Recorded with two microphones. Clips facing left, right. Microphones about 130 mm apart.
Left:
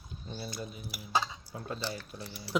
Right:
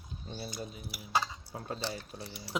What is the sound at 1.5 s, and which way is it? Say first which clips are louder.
Speech: even; 30° right (ahead or behind).